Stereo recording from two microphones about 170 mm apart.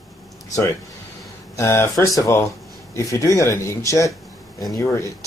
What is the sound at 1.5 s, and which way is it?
Speech, 15° left (ahead or behind).